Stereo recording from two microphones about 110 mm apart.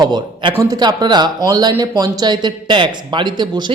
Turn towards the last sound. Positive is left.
turn(degrees=-40)  # may be behind; listen again after turning